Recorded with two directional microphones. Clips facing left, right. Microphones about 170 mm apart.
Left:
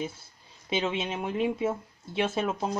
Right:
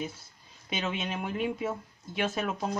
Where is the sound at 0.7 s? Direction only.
30° left (ahead or behind).